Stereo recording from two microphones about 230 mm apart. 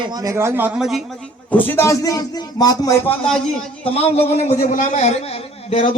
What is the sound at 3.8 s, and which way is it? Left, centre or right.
A man's voice, left.